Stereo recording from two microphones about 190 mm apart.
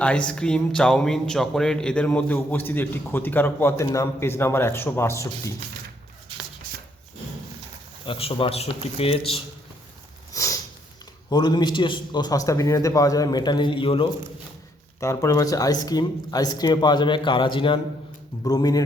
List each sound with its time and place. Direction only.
0.0 s speech: 5° left (ahead or behind)
8.0 s speech: 30° left (ahead or behind)
10.3 s a sound: 15° left (ahead or behind)
11.3 s a man's voice: 20° left (ahead or behind)
15.0 s a man's voice: 15° left (ahead or behind)